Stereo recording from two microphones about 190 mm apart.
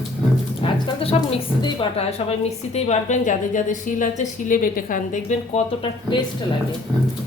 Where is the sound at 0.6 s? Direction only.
30° left (ahead or behind).